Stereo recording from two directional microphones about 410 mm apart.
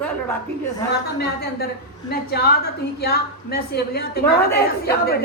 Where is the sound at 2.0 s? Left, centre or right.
Left.